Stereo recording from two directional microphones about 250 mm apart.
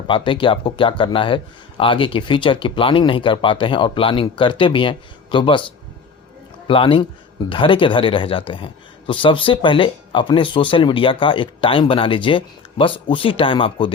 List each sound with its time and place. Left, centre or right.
0.1 s a man's voice: centre
6.7 s a man's voice: left